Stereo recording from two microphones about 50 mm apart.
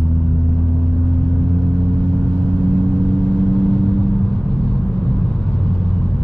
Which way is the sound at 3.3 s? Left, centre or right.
Left.